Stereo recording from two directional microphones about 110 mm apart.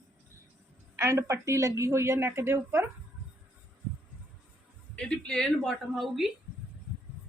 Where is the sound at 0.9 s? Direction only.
25° right (ahead or behind).